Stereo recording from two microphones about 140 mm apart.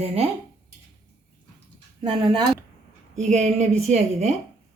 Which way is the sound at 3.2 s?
55° right (ahead or behind).